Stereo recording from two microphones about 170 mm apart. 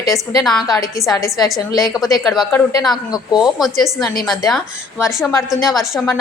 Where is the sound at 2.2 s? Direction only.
Centre (ahead or behind).